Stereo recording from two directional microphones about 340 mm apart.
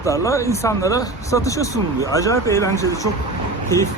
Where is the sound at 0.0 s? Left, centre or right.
Centre.